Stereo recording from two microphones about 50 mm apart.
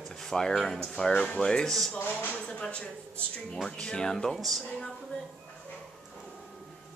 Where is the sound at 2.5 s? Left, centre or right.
Left.